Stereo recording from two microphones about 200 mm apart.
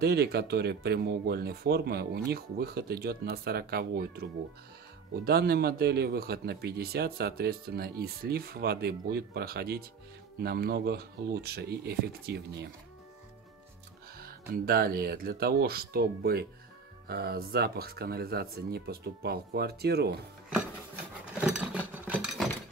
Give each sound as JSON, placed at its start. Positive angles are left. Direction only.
{"t": 0.0, "sound": "speech", "side_deg": -55}
{"t": 14.5, "sound": "speech", "side_deg": -50}
{"t": 22.0, "sound": "wood", "side_deg": -5}